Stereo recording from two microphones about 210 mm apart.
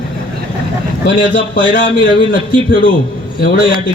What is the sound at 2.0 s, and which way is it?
Speech, 40° left (ahead or behind).